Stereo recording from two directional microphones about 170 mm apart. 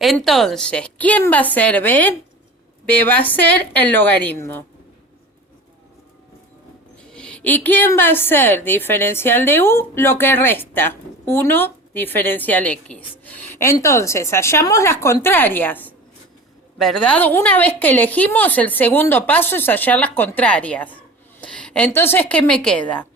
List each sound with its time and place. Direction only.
0.0 s a woman's voice: centre (ahead or behind)
7.1 s a woman's voice: 5° left (ahead or behind)